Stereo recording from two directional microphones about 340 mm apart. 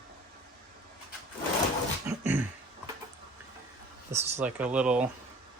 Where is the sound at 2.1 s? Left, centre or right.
Centre.